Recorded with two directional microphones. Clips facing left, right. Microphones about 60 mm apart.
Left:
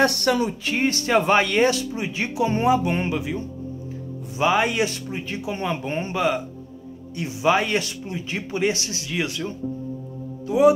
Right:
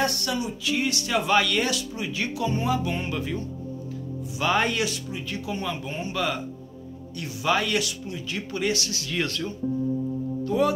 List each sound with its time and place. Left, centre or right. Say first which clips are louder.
0.0 s speech: left 7 dB; left
3.1 s speech: left 3 dB; centre
4.4 s speech: left 4 dB; centre
4.9 s speech: left 3 dB; left
6.1 s speech: left 5 dB; left
9.1 s speech: left 2 dB; centre
10.4 s speech: left 7 dB; centre